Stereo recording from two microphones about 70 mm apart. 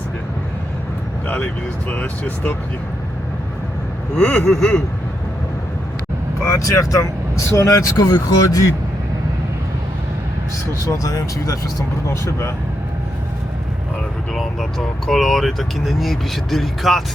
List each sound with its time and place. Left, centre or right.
1.9 s speech: left
4.2 s speech: centre
6.4 s speech: left
10.8 s speech: left
14.3 s speech: centre